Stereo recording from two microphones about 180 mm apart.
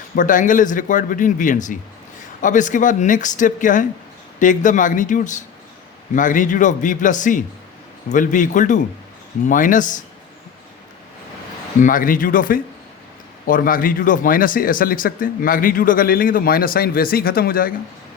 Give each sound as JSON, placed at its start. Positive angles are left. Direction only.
{"t": 0.2, "sound": "speech", "side_deg": 45}
{"t": 11.8, "sound": "speech", "side_deg": 50}